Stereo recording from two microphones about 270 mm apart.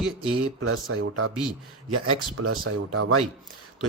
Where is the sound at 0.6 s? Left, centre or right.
Right.